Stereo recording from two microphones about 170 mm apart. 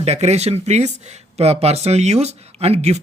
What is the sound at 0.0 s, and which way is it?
Speech, 40° right (ahead or behind).